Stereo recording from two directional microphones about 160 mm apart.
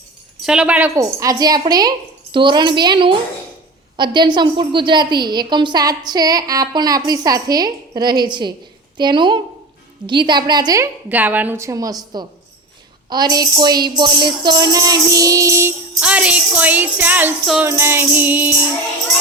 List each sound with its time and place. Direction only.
0.4 s a woman's voice: 5° right (ahead or behind)
0.9 s a woman's voice: 20° right (ahead or behind)
11.1 s jingle bell: 10° right (ahead or behind)
13.1 s a woman's voice: 25° right (ahead or behind)
16.0 s jingle bell: 5° right (ahead or behind)